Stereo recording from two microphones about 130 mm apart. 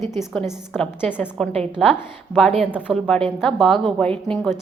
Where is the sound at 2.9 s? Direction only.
5° left (ahead or behind).